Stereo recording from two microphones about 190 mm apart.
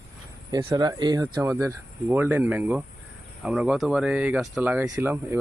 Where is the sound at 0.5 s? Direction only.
20° right (ahead or behind).